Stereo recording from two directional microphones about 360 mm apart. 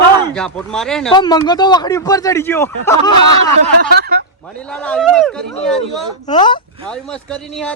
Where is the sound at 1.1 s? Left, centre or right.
Centre.